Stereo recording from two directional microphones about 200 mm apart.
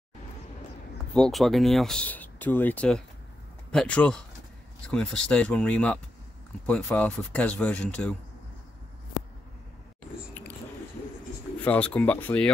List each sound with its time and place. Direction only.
1.1 s speech: centre (ahead or behind)
11.6 s speech: 5° left (ahead or behind)